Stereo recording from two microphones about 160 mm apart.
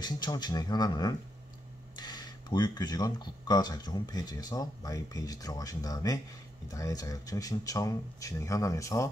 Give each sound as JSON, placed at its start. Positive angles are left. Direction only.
{"t": 0.0, "sound": "speech", "side_deg": 25}